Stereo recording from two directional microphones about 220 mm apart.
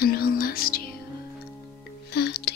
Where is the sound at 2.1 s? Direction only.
50° left (ahead or behind).